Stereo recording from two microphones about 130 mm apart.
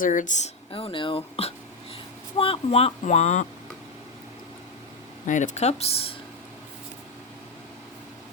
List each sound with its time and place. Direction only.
0.0 s speech: 85° left; by 0.5 s 70° left (ahead or behind)
0.7 s speech: 45° left (ahead or behind); by 3.4 s 60° left (ahead or behind)
5.2 s speech: 70° left (ahead or behind); by 6.1 s 50° left (ahead or behind)